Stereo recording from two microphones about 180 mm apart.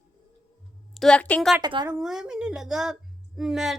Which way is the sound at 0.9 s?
5° left (ahead or behind).